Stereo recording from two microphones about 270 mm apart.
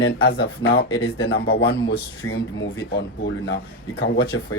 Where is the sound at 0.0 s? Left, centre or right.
Left.